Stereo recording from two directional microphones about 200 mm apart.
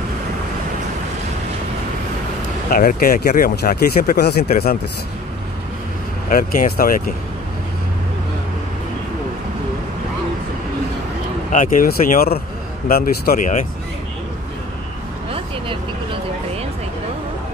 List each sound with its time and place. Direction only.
2.7 s speech: 45° left (ahead or behind)
6.2 s speech: 45° left (ahead or behind)
11.5 s speech: 40° left (ahead or behind)